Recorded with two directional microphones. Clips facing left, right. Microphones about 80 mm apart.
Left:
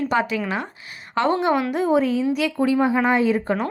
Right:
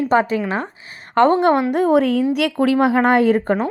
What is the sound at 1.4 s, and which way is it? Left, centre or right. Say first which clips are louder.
A woman's voice: right 5 dB; right.